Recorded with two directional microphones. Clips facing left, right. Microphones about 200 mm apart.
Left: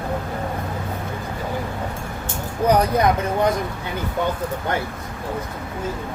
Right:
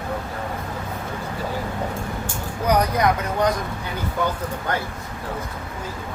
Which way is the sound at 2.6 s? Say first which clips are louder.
Left 2 dB; 30° left (ahead or behind).